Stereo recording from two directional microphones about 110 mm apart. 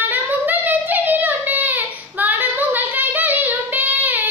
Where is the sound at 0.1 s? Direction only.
15° right (ahead or behind).